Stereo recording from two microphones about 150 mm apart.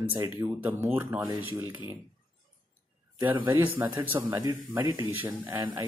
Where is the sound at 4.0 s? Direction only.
20° right (ahead or behind).